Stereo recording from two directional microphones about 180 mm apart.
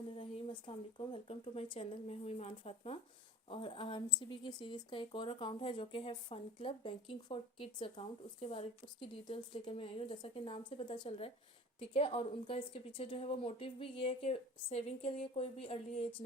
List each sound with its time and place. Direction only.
0.6 s a woman's voice: 25° left (ahead or behind)